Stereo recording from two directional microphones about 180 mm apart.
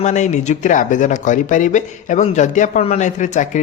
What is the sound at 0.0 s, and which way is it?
Speech, 40° left (ahead or behind).